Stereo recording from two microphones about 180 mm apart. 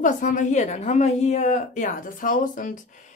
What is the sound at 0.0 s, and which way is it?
A woman's voice, 45° left (ahead or behind).